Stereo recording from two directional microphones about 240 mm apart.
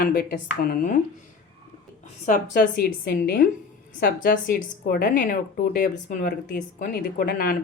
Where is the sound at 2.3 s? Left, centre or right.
Left.